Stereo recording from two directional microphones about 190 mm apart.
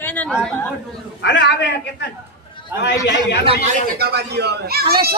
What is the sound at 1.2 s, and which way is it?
Speech, 70° left (ahead or behind).